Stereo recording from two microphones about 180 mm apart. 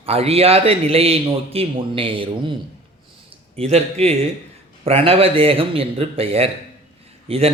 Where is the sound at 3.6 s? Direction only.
35° right (ahead or behind).